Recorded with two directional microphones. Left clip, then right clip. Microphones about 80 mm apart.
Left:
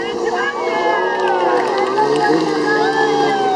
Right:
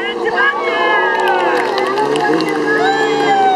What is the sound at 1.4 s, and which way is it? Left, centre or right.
Run, right.